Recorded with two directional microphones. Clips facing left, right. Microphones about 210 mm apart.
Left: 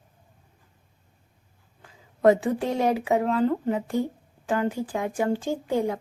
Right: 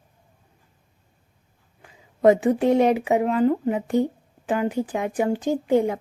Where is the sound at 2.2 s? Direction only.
20° right (ahead or behind).